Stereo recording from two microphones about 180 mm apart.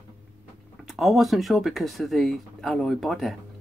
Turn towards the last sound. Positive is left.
turn(degrees=0)  # may be behind; listen again after turning